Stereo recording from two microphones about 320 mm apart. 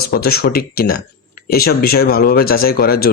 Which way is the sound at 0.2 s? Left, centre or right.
Left.